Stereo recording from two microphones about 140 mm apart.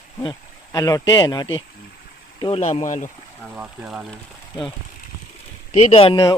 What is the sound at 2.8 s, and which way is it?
Speech, 60° left (ahead or behind).